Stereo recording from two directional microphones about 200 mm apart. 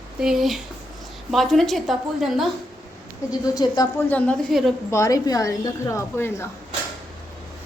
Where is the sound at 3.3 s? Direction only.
20° left (ahead or behind).